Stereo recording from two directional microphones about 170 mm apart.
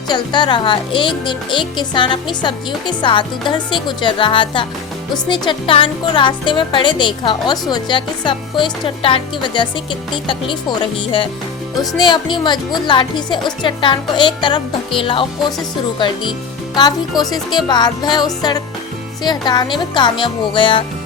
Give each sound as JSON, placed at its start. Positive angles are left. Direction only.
{"t": 0.1, "sound": "speech", "side_deg": 25}